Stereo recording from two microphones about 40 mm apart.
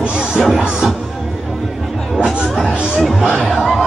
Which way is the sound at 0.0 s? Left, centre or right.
Right.